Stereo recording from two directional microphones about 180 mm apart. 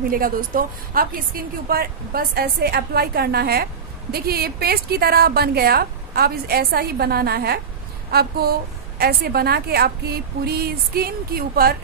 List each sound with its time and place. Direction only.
0.1 s a woman's voice: 50° right (ahead or behind)